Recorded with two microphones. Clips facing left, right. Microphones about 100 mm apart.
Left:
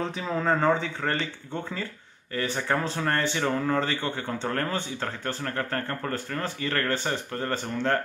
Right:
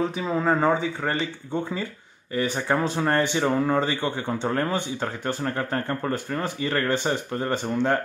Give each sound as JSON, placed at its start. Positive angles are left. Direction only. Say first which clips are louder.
{"t": 0.0, "sound": "speech", "louder": "right 4 dB", "side_deg": -10}